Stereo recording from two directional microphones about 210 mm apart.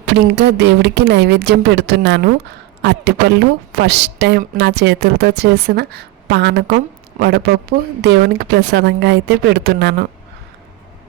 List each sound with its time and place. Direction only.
0.0 s a woman's voice: 55° right (ahead or behind)